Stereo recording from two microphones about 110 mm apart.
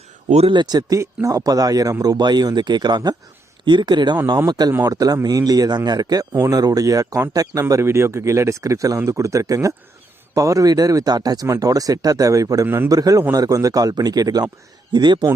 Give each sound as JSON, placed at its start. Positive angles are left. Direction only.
{"t": 0.3, "sound": "speech", "side_deg": -75}
{"t": 0.5, "sound": "speech", "side_deg": -40}
{"t": 12.6, "sound": "speech", "side_deg": -20}
{"t": 12.9, "sound": "speech", "side_deg": -35}